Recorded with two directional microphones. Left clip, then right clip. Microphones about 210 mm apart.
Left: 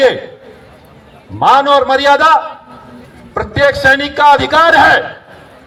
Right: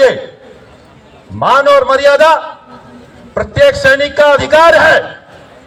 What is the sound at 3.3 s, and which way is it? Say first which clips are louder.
A man's voice: right 3 dB; 30° left (ahead or behind).